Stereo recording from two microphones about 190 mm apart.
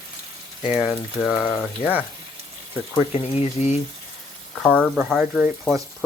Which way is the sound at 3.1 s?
35° left (ahead or behind).